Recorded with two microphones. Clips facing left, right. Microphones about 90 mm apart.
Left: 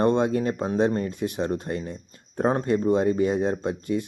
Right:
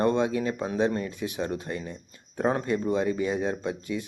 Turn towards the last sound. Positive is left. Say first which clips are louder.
# left 4 dB
turn(degrees=45)  # may be behind; listen again after turning